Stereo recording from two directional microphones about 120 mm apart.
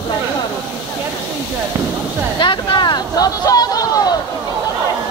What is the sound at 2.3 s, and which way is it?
Speech, 40° left (ahead or behind).